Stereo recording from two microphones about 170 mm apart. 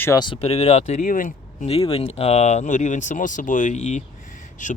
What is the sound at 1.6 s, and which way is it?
Speech, 35° left (ahead or behind).